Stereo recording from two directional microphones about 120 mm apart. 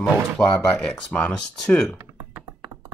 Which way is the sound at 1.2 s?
5° left (ahead or behind).